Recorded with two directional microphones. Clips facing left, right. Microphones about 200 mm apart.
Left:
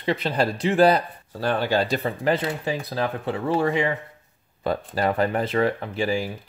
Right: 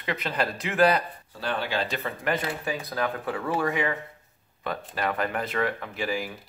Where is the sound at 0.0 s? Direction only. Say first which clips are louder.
Left 6 dB; 30° left (ahead or behind).